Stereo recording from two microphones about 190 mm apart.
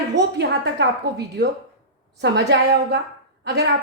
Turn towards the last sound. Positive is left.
turn(degrees=-60)  # may be behind; listen again after turning